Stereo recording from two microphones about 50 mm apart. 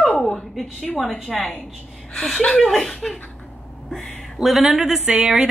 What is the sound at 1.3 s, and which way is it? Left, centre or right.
Speech, centre.